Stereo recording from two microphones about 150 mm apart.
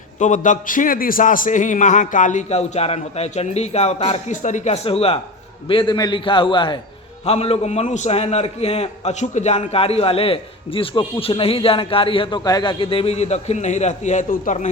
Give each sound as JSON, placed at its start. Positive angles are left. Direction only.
{"t": 0.2, "sound": "a man's voice", "side_deg": 55}
{"t": 4.3, "sound": "a man's voice", "side_deg": 55}